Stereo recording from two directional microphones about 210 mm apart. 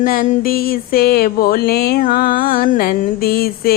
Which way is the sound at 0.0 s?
40° left (ahead or behind).